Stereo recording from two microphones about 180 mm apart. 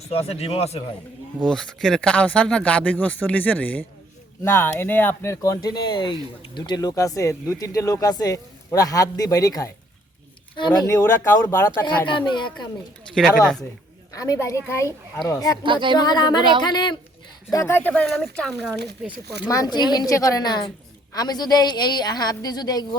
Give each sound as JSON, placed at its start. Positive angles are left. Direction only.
{"t": 0.1, "sound": "speech", "side_deg": 35}
{"t": 1.4, "sound": "speech", "side_deg": 5}
{"t": 11.0, "sound": "speech", "side_deg": 10}
{"t": 11.9, "sound": "speech", "side_deg": 25}
{"t": 13.1, "sound": "speech", "side_deg": 0}
{"t": 14.1, "sound": "speech", "side_deg": 20}
{"t": 15.6, "sound": "speech", "side_deg": -25}
{"t": 16.0, "sound": "speech", "side_deg": 20}
{"t": 19.5, "sound": "speech", "side_deg": 20}